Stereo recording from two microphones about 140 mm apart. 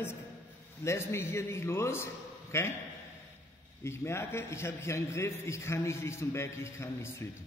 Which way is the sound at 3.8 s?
20° left (ahead or behind).